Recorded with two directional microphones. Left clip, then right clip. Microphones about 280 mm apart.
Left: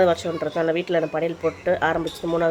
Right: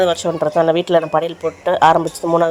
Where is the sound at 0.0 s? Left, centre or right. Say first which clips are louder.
Right 4 dB; centre.